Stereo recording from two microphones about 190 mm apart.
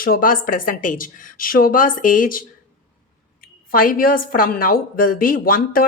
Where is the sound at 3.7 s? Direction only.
50° left (ahead or behind).